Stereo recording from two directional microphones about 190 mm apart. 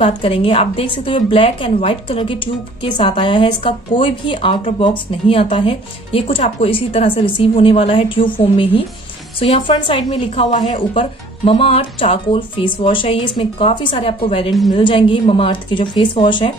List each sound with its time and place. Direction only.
0.0 s a woman's voice: 30° left (ahead or behind)